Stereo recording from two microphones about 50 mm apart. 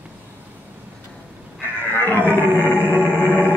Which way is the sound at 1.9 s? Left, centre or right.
Left.